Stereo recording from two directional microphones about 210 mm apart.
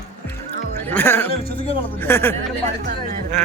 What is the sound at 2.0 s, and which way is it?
Speech, 10° left (ahead or behind).